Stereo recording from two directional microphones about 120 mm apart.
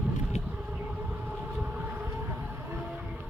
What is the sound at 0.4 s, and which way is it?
Vehicle, 10° right (ahead or behind).